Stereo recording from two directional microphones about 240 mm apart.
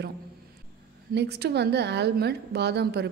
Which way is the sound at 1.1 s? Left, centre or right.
Right.